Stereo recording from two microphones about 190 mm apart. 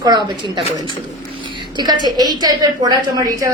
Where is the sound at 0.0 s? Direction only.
20° right (ahead or behind).